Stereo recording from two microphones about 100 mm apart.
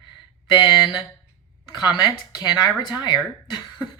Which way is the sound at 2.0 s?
45° left (ahead or behind).